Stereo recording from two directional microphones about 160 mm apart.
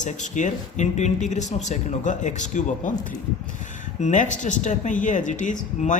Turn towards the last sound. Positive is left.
turn(degrees=50)  # may be behind; listen again after turning